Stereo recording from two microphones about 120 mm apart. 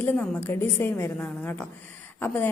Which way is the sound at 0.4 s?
20° left (ahead or behind).